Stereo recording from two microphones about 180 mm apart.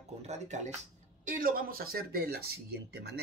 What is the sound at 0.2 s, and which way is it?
Speech, 40° right (ahead or behind).